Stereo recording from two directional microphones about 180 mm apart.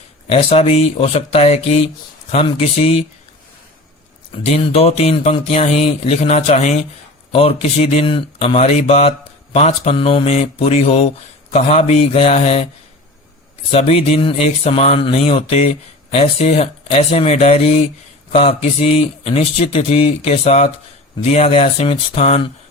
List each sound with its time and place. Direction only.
0.3 s speech: 35° left (ahead or behind)
4.4 s speech: 35° left (ahead or behind)
13.7 s speech: 35° left (ahead or behind)